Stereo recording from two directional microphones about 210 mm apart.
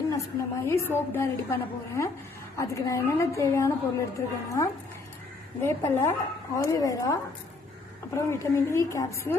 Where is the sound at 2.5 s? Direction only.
15° left (ahead or behind).